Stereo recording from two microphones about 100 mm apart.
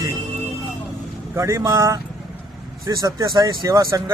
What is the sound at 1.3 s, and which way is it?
A man's voice, 30° right (ahead or behind).